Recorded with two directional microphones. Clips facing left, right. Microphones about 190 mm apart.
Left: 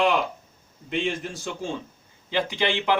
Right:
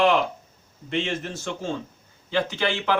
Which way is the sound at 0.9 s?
10° left (ahead or behind).